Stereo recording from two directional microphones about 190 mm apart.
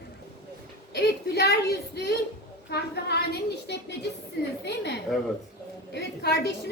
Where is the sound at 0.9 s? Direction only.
60° left (ahead or behind).